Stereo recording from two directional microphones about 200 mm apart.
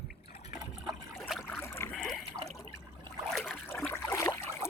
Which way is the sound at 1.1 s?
Centre (ahead or behind).